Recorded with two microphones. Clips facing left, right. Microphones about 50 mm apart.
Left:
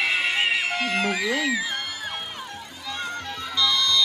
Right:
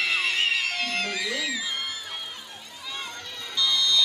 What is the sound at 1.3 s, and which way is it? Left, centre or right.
Speech, left.